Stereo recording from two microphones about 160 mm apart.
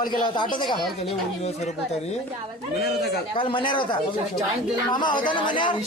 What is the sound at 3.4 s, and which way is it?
Speech, 30° left (ahead or behind).